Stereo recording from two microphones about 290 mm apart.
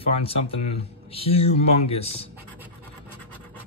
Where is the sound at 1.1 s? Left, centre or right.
Centre.